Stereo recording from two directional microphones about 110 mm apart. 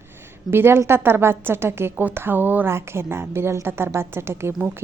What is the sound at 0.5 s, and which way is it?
A woman's voice, 20° right (ahead or behind).